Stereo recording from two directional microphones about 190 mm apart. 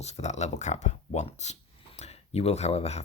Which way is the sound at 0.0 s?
35° left (ahead or behind).